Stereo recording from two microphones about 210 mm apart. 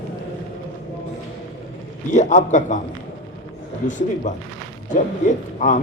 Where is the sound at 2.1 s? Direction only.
35° left (ahead or behind).